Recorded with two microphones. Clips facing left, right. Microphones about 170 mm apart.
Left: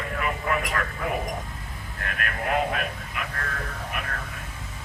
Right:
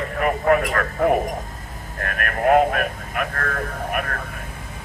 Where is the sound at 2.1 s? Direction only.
55° right (ahead or behind).